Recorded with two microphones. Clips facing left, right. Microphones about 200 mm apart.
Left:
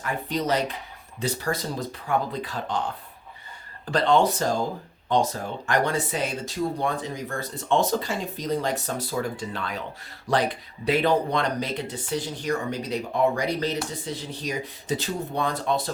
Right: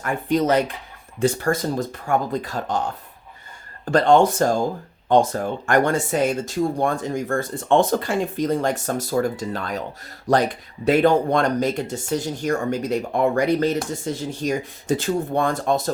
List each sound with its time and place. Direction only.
0.0 s speech: 50° right (ahead or behind)
3.9 s speech: 45° right (ahead or behind)